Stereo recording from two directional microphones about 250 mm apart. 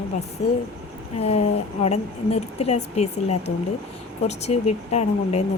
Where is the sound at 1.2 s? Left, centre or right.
Left.